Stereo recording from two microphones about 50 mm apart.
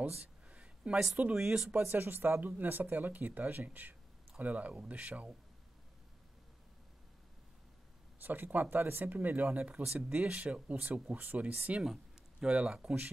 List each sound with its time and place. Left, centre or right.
0.5 s a sound: right
1.3 s speech: centre
1.8 s speech: right
8.2 s speech: right
12.4 s speech: right